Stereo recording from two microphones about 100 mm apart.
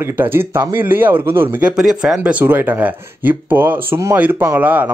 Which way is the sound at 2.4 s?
20° right (ahead or behind).